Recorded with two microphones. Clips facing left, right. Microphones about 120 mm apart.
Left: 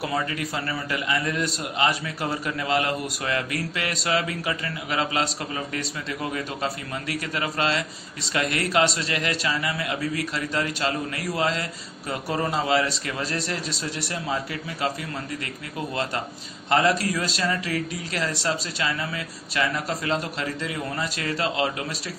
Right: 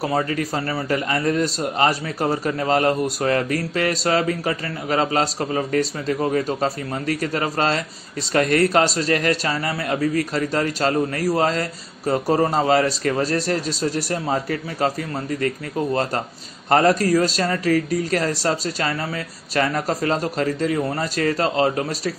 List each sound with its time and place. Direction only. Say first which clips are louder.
0.0 s speech: right 5 dB; 40° right (ahead or behind)